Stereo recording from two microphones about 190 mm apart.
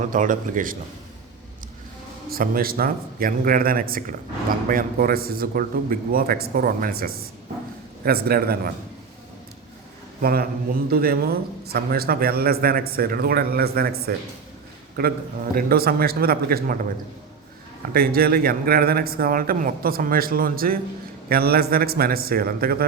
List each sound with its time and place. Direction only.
0.0 s speech: 45° right (ahead or behind)
2.3 s speech: 50° right (ahead or behind)
10.2 s a man's voice: 50° right (ahead or behind)
17.9 s speech: 55° right (ahead or behind)